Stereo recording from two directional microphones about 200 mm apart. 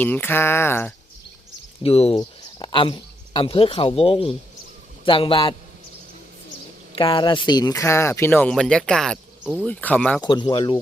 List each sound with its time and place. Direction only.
0.0 s speech: 10° left (ahead or behind)
1.8 s a man's voice: 30° left (ahead or behind)
6.9 s speech: 25° left (ahead or behind); by 9.6 s 5° right (ahead or behind)
9.6 s speech: 5° left (ahead or behind)
10.2 s a man's voice: 20° left (ahead or behind)